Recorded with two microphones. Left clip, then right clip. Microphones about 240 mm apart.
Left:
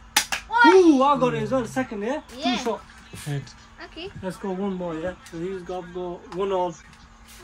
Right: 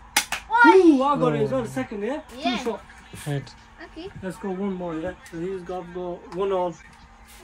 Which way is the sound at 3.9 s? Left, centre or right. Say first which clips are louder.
Left 2 dB; centre.